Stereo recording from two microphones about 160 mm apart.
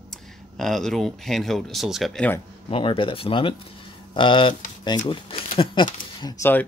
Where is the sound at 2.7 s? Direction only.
35° left (ahead or behind).